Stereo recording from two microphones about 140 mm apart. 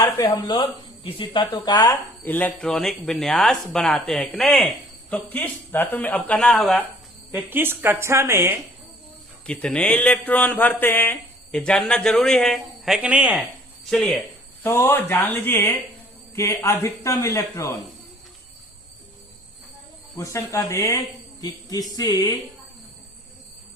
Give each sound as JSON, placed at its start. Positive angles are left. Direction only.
{"t": 0.0, "sound": "speech", "side_deg": 30}
{"t": 2.2, "sound": "speech", "side_deg": 10}
{"t": 5.1, "sound": "a man's voice", "side_deg": 15}
{"t": 7.3, "sound": "a woman's voice", "side_deg": -15}
{"t": 9.5, "sound": "a man's voice", "side_deg": 10}
{"t": 13.9, "sound": "speech", "side_deg": 0}
{"t": 14.6, "sound": "a man's voice", "side_deg": 15}
{"t": 20.1, "sound": "a man's voice", "side_deg": 20}